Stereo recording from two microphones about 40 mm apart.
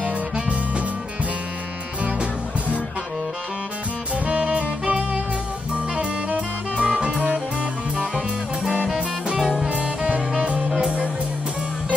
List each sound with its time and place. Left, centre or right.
0.0 s music: right
4.3 s saxophone: right
5.9 s music: right
9.4 s music: centre
9.7 s music: right